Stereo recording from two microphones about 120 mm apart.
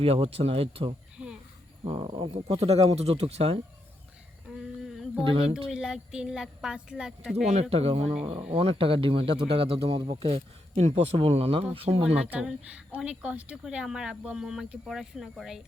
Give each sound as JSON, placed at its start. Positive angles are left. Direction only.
{"t": 0.0, "sound": "speech", "side_deg": -55}
{"t": 1.2, "sound": "a sound", "side_deg": -15}
{"t": 1.8, "sound": "speech", "side_deg": -60}
{"t": 2.0, "sound": "speech", "side_deg": -50}
{"t": 5.6, "sound": "speech", "side_deg": -5}
{"t": 7.4, "sound": "speech", "side_deg": -65}
{"t": 12.1, "sound": "speech", "side_deg": -10}